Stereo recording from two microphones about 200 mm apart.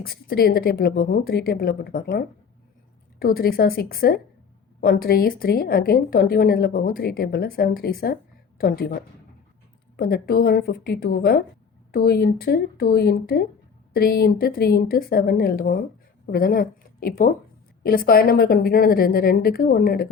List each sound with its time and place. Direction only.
0.0 s a woman's voice: 50° left (ahead or behind)